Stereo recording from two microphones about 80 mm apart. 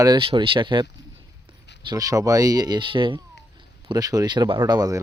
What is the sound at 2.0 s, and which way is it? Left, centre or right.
Speech, right.